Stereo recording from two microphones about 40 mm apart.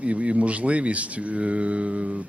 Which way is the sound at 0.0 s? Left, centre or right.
Right.